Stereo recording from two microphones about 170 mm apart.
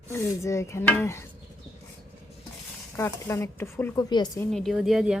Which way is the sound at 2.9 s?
15° left (ahead or behind).